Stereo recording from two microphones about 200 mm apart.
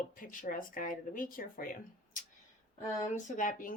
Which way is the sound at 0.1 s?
45° left (ahead or behind).